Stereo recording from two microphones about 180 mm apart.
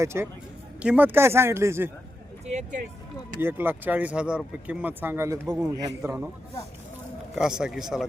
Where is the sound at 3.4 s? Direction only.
10° right (ahead or behind).